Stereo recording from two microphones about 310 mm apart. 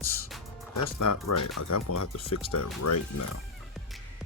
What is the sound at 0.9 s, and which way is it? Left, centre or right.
Speech, left.